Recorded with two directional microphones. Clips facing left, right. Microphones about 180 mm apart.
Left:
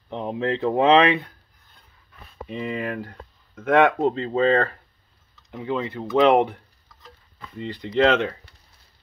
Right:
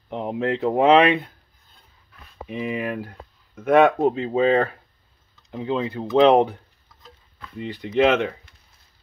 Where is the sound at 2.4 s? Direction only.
10° right (ahead or behind).